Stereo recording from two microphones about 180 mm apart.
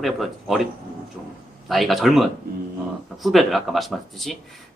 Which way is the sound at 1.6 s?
Centre (ahead or behind).